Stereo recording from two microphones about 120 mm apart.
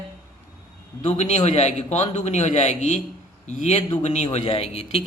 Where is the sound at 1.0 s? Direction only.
70° left (ahead or behind).